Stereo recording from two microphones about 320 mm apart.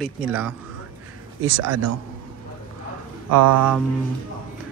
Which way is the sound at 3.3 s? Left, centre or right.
Right.